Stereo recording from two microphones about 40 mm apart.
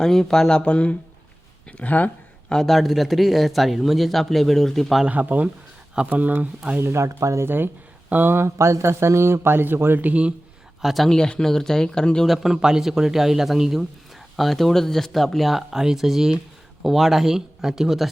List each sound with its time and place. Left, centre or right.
0.0 s speech: centre
0.6 s speech: left
1.8 s speech: left
2.5 s speech: centre
5.0 s speech: right
7.4 s speech: right
8.3 s speech: right
10.0 s speech: right
10.8 s speech: centre
11.1 s speech: centre
12.4 s a man's voice: centre